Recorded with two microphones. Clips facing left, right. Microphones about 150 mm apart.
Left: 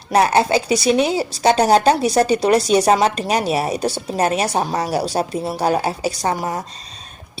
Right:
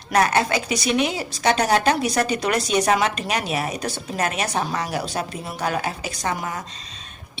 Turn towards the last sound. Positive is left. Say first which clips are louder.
# left 5 dB
turn(degrees=35)  # may be behind; listen again after turning